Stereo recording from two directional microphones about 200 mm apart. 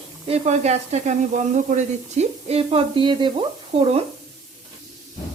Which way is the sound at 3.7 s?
30° right (ahead or behind).